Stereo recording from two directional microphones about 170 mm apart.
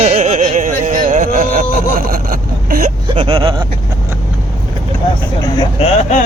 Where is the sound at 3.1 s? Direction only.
30° right (ahead or behind).